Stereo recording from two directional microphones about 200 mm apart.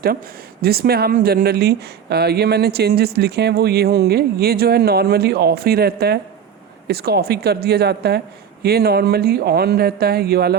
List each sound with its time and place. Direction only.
0.6 s speech: 50° right (ahead or behind)